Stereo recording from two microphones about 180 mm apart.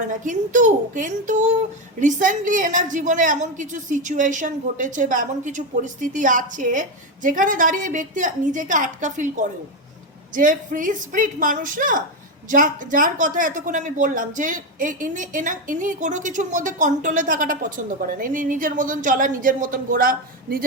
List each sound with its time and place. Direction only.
0.3 s speech: 45° right (ahead or behind)